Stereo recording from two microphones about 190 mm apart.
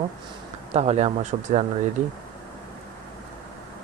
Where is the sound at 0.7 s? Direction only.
35° right (ahead or behind).